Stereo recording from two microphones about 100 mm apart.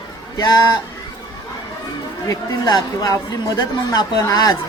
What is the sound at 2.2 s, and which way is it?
Speech, 40° left (ahead or behind).